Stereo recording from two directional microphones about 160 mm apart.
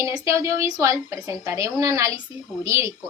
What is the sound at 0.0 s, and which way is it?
A woman's voice, 20° right (ahead or behind).